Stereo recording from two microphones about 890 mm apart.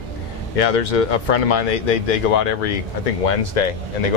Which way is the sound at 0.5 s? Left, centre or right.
Left.